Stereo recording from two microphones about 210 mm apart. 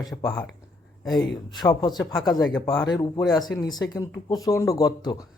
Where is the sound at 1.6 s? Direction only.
20° left (ahead or behind).